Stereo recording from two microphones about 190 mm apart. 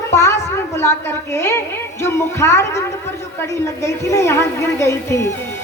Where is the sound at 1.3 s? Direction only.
15° left (ahead or behind).